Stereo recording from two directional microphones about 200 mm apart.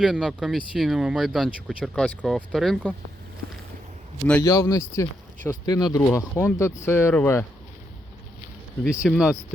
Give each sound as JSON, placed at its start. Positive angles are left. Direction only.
{"t": 0.0, "sound": "speech", "side_deg": 0}
{"t": 4.3, "sound": "speech", "side_deg": 15}
{"t": 9.0, "sound": "speech", "side_deg": 0}